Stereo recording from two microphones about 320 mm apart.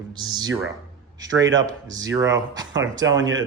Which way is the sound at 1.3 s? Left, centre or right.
Right.